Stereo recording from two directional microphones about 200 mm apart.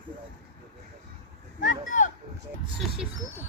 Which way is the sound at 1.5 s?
40° left (ahead or behind).